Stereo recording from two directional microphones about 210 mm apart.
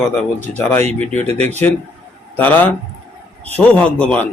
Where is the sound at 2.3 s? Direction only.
10° left (ahead or behind).